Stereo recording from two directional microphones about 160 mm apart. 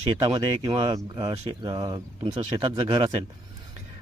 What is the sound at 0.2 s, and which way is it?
Speech, 30° right (ahead or behind).